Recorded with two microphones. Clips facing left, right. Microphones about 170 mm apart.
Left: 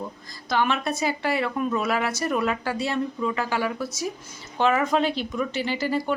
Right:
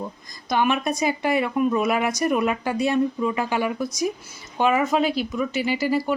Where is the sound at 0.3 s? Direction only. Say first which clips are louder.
Right 2 dB; 15° right (ahead or behind).